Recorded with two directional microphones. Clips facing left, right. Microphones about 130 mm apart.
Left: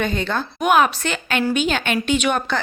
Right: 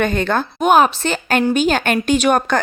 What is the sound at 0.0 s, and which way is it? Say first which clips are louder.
Speech: right 5 dB; 55° right (ahead or behind).